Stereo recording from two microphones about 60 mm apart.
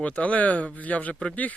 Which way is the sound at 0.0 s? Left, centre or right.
Left.